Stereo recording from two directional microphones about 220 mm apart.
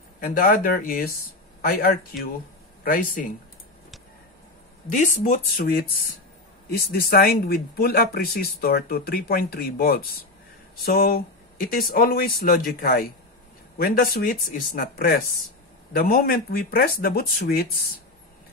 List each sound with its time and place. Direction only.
0.2 s speech: 40° left (ahead or behind)
4.9 s speech: 35° left (ahead or behind)